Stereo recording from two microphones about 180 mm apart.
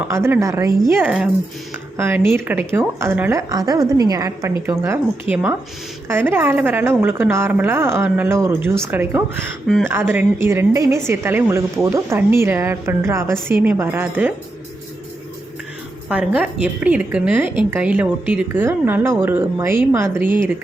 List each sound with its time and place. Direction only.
0.1 s a woman's voice: 15° right (ahead or behind)
16.0 s a woman's voice: 5° right (ahead or behind)